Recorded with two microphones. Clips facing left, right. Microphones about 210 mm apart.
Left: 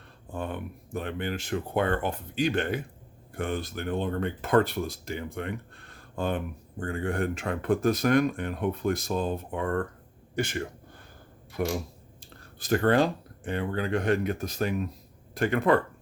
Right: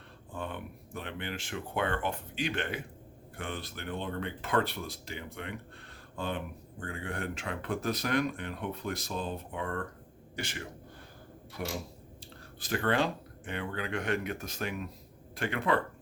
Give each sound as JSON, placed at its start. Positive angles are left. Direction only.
{"t": 0.3, "sound": "speech", "side_deg": 45}
{"t": 11.6, "sound": "a sound", "side_deg": 55}
{"t": 12.5, "sound": "speech", "side_deg": 45}